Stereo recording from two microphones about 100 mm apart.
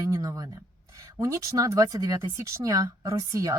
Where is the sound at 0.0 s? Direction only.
35° right (ahead or behind).